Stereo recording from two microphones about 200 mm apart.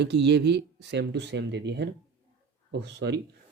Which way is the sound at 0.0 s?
60° right (ahead or behind).